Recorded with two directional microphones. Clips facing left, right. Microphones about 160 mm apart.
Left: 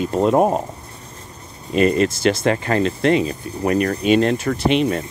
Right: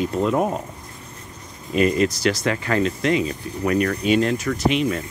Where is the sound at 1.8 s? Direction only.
30° left (ahead or behind).